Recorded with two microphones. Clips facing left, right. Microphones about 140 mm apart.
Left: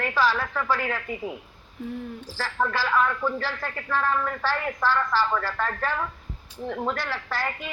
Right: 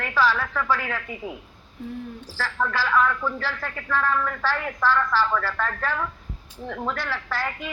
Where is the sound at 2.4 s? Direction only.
15° left (ahead or behind).